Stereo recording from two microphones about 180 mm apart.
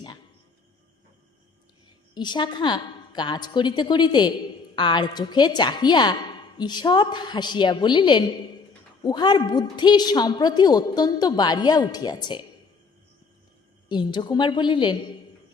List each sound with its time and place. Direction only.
2.1 s a woman's voice: 25° left (ahead or behind)
13.8 s a woman's voice: 25° left (ahead or behind)